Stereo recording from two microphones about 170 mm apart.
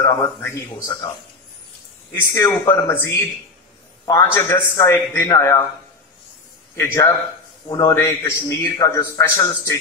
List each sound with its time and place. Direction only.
0.2 s a man's voice: 15° left (ahead or behind)
2.3 s a man's voice: 20° left (ahead or behind)
6.7 s a man's voice: 15° left (ahead or behind)